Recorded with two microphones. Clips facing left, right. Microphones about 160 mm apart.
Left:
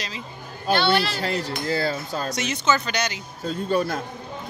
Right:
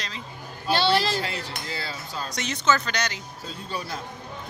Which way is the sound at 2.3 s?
5° left (ahead or behind).